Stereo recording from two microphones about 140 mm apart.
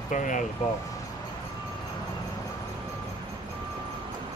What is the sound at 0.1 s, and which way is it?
Speech, 65° left (ahead or behind).